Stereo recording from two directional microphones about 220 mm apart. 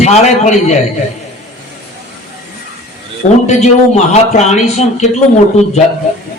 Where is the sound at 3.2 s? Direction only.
35° left (ahead or behind).